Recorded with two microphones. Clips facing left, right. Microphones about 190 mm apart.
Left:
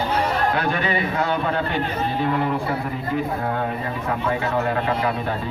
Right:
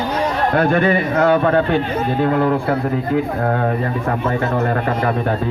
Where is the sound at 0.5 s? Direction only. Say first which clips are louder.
Right 8 dB; 50° right (ahead or behind).